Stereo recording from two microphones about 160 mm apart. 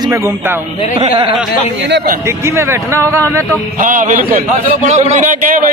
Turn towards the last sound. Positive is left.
turn(degrees=-55)  # may be behind; listen again after turning